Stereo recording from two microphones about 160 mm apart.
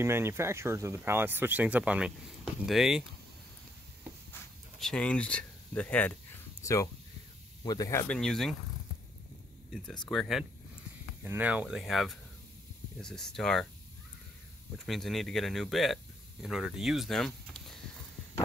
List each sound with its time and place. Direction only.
0.0 s speech: 15° right (ahead or behind)
4.7 s speech: 5° left (ahead or behind); by 8.1 s 20° left (ahead or behind)
8.1 s speech: 5° left (ahead or behind)
9.7 s speech: 5° left (ahead or behind)
11.2 s speech: 10° right (ahead or behind)
14.9 s speech: centre (ahead or behind)